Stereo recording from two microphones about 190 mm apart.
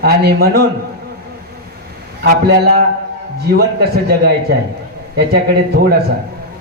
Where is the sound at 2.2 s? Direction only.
55° right (ahead or behind).